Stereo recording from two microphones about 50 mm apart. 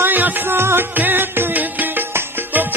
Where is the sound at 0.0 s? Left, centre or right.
Right.